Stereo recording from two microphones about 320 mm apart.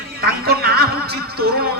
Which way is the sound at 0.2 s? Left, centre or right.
Right.